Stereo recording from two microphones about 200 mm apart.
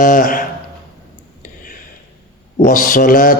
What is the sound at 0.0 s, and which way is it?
Speech, 45° left (ahead or behind).